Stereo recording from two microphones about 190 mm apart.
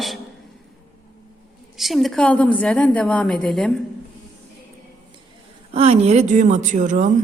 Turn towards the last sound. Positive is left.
turn(degrees=-40)  # may be behind; listen again after turning